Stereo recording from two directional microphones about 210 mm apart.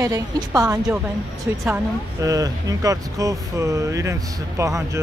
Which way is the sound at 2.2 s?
15° right (ahead or behind).